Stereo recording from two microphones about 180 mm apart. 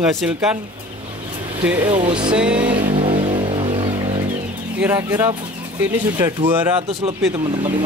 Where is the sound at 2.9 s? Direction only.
30° right (ahead or behind).